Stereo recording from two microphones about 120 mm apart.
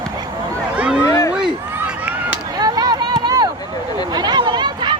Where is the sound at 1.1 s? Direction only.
25° left (ahead or behind).